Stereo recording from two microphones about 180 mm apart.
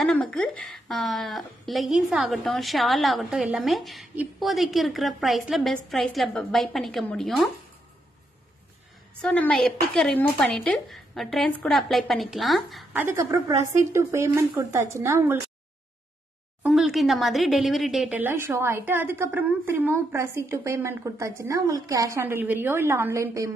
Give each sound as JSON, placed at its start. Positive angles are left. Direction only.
{"t": 0.0, "sound": "a woman's voice", "side_deg": 5}
{"t": 9.2, "sound": "a woman's voice", "side_deg": 5}
{"t": 13.0, "sound": "speech", "side_deg": -15}
{"t": 16.6, "sound": "speech", "side_deg": -5}